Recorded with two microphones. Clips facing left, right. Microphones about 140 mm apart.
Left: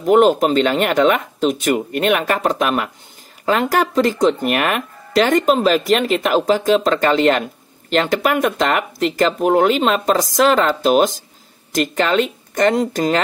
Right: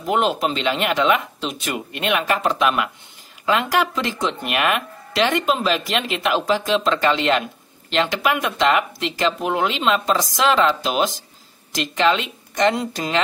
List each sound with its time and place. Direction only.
0.0 s speech: 45° left (ahead or behind)